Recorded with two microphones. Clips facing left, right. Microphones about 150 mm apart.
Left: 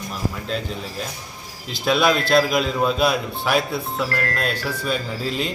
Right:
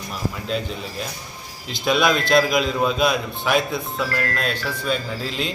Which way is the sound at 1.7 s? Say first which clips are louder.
Left 1 dB; 5° left (ahead or behind).